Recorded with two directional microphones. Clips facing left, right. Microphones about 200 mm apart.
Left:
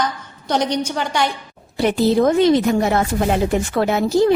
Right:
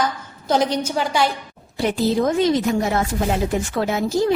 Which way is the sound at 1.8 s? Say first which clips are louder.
Left 4 dB; 65° left (ahead or behind).